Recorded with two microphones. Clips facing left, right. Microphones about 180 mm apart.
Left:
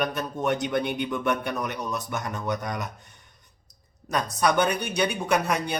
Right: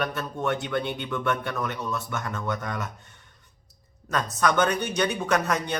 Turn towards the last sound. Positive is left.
turn(degrees=10)  # may be behind; listen again after turning